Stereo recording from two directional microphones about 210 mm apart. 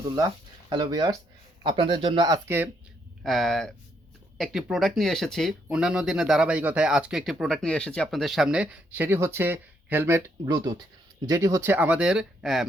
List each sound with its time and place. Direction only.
0.2 s speech: 20° right (ahead or behind)
3.2 s speech: centre (ahead or behind)